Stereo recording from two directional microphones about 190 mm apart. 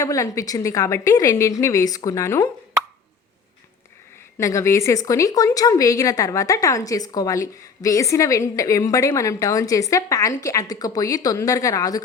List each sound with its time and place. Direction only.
0.0 s a woman's voice: 15° left (ahead or behind)
4.4 s a woman's voice: 15° left (ahead or behind)